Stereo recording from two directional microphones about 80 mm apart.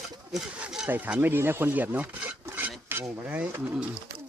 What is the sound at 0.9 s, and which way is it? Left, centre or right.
Speech, right.